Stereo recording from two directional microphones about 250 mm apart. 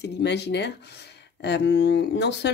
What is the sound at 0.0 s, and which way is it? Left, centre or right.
Speech, left.